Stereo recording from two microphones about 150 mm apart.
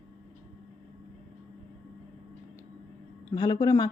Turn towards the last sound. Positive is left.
turn(degrees=25)  # may be behind; listen again after turning